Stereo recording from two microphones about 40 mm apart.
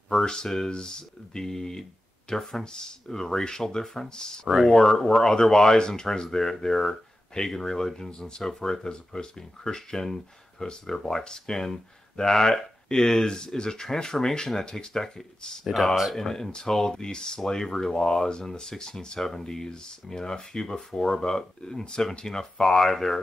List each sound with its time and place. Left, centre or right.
0.2 s speech: centre
15.6 s speech: centre